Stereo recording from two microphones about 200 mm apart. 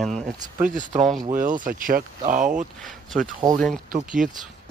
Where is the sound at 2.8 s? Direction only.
Centre (ahead or behind).